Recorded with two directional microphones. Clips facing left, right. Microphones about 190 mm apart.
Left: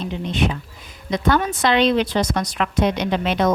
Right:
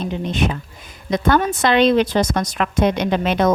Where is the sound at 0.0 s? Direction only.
45° right (ahead or behind).